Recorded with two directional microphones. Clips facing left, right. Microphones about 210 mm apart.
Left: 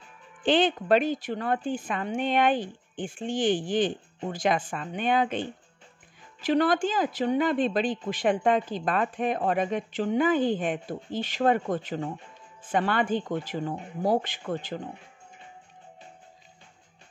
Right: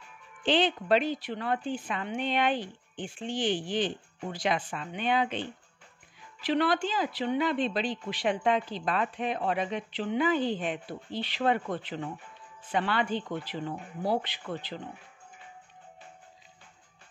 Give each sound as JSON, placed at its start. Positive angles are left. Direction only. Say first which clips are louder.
{"t": 0.4, "sound": "speech", "louder": "left 3 dB", "side_deg": 50}